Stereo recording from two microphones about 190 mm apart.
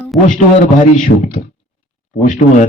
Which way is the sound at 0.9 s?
40° left (ahead or behind).